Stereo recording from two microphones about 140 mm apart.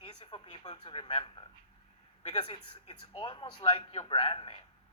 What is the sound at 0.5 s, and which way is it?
Speech, 30° left (ahead or behind).